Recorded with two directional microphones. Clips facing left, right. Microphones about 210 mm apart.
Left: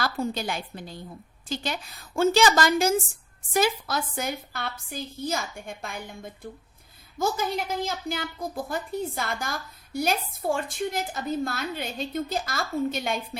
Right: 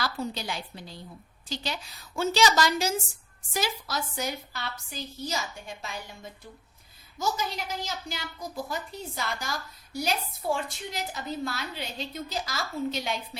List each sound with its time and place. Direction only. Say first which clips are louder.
0.0 s a woman's voice: left 4 dB; 50° left (ahead or behind)